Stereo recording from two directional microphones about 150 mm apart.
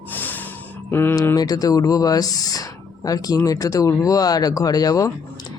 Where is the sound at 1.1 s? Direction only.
25° left (ahead or behind).